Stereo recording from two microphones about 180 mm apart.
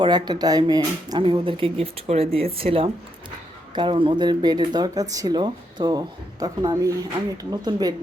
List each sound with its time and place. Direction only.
0.0 s speech: 25° right (ahead or behind)